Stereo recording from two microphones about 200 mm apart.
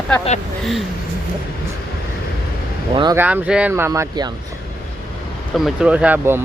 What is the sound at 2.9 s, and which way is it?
Speech, 20° right (ahead or behind).